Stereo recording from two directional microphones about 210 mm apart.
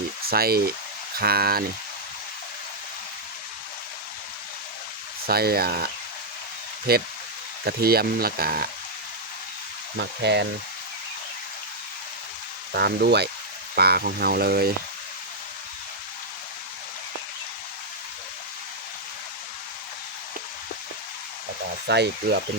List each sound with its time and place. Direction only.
0.3 s speech: 45° right (ahead or behind)
5.2 s speech: 45° right (ahead or behind)
10.0 s speech: 55° right (ahead or behind)
12.7 s speech: 50° right (ahead or behind)
21.8 s speech: 55° right (ahead or behind)